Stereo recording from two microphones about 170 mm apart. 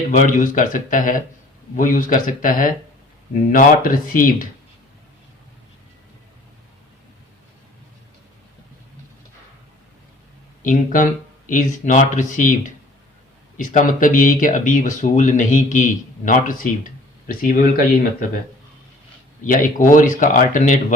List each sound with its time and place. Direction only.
0.1 s speech: 50° left (ahead or behind)
10.6 s speech: 50° left (ahead or behind)
13.6 s speech: 50° left (ahead or behind)
19.5 s speech: 50° left (ahead or behind)